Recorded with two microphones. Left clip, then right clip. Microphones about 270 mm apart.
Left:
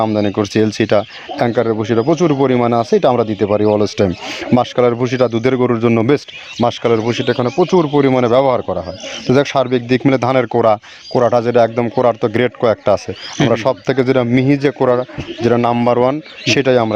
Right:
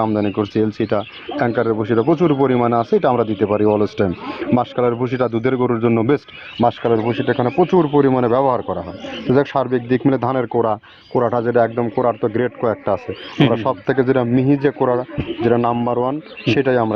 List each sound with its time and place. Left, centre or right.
0.0 s speech: left